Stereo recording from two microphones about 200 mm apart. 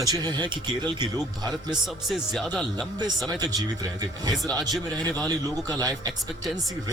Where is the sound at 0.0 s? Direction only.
20° right (ahead or behind).